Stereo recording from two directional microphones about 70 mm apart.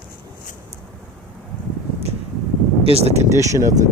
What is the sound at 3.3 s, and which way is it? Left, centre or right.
Speech, right.